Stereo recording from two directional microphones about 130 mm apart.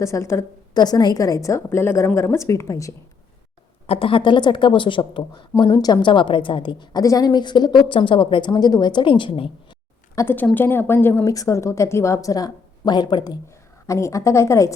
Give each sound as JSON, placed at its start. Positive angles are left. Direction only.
{"t": 0.0, "sound": "a woman's voice", "side_deg": 20}
{"t": 3.8, "sound": "a woman's voice", "side_deg": 45}
{"t": 10.2, "sound": "a woman's voice", "side_deg": 15}